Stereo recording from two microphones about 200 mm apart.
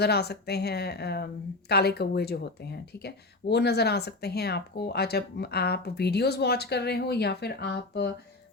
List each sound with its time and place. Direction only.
0.0 s speech: 55° left (ahead or behind)